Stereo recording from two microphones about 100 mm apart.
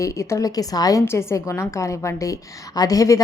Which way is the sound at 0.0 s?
30° left (ahead or behind).